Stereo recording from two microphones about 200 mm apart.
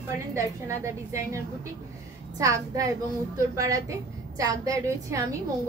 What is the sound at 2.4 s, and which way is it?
A woman's voice, 15° right (ahead or behind).